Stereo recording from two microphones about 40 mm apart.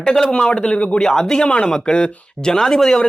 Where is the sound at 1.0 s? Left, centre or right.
Centre.